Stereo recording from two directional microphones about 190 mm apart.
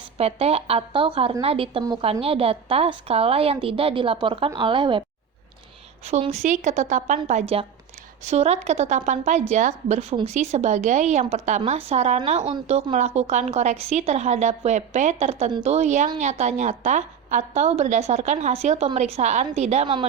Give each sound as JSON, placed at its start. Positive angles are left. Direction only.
{"t": 0.2, "sound": "a woman's voice", "side_deg": -35}
{"t": 6.1, "sound": "a woman's voice", "side_deg": -35}